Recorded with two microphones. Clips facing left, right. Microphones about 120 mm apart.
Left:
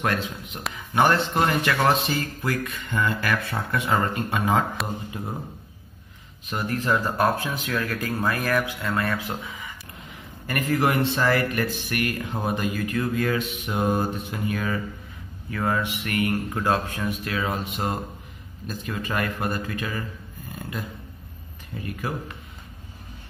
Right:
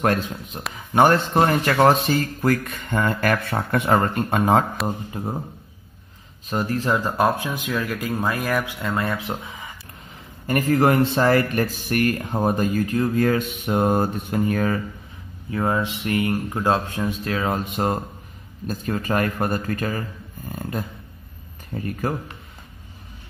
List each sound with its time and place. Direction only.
0.0 s speech: 45° right (ahead or behind)
4.8 s speech: 40° right (ahead or behind)
6.5 s speech: 30° right (ahead or behind)
6.9 s speech: 15° right (ahead or behind)
10.7 s speech: 45° right (ahead or behind)
15.5 s speech: 25° right (ahead or behind)
17.5 s speech: 45° right (ahead or behind)
21.7 s speech: 45° right (ahead or behind)